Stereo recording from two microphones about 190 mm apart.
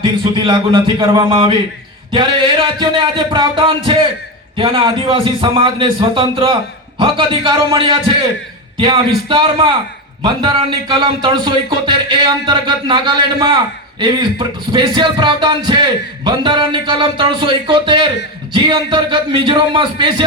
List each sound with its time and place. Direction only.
0.3 s speech: 25° right (ahead or behind)